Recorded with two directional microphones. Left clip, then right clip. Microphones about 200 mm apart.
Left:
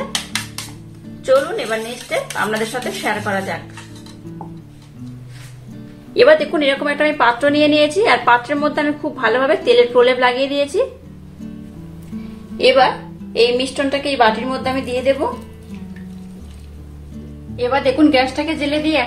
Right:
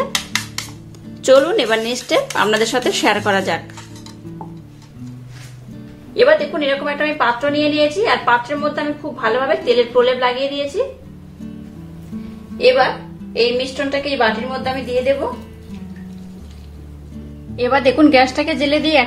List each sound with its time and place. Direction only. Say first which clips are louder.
1.2 s a woman's voice: right 4 dB; 50° right (ahead or behind)
6.1 s a woman's voice: left 2 dB; 30° left (ahead or behind)
12.5 s a woman's voice: left 1 dB; 30° left (ahead or behind)
17.6 s a woman's voice: right 2 dB; 15° right (ahead or behind)